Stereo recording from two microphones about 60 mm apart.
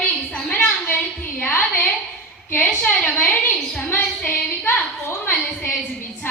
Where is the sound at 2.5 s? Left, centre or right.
Left.